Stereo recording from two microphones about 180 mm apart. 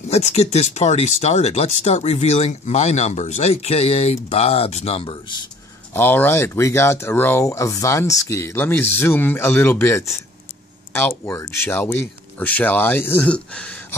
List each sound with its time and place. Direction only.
0.1 s speech: 35° left (ahead or behind)
5.9 s speech: 10° left (ahead or behind)